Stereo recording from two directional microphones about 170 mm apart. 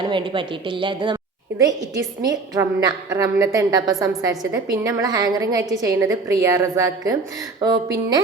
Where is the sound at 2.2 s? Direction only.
20° right (ahead or behind).